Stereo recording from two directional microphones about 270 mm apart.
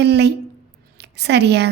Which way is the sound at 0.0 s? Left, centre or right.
Right.